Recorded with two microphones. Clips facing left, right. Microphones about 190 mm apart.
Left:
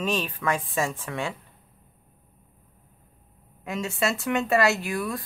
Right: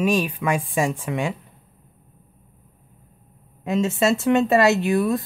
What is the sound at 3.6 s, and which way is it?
Speech, 25° right (ahead or behind).